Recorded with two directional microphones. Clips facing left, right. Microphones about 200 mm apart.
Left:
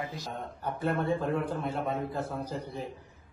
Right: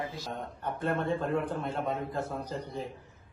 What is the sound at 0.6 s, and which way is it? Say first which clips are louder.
A man's voice: left 1 dB; 5° left (ahead or behind).